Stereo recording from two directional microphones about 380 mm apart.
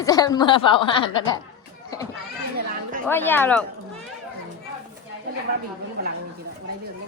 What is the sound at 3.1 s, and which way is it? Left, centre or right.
Speech, centre.